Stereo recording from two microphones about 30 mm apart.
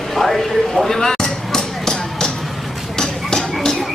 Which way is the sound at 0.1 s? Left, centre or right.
Centre.